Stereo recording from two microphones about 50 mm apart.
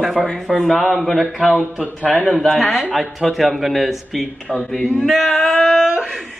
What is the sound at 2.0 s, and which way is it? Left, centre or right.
Speech, left.